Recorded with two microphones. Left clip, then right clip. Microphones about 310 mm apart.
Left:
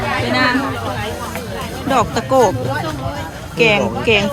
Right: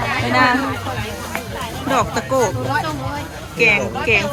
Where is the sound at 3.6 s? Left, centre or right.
Centre.